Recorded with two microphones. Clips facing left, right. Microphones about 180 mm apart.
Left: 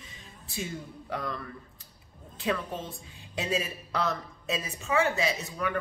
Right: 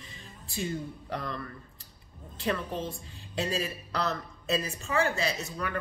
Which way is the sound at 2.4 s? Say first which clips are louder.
Even; centre (ahead or behind).